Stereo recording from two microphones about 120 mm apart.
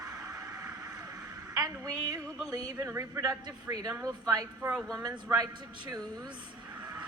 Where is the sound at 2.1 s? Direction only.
30° right (ahead or behind).